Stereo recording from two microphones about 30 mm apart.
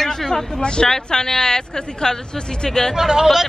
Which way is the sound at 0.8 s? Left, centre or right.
Centre.